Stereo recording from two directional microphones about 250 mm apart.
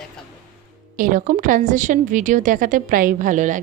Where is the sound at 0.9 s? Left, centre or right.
Right.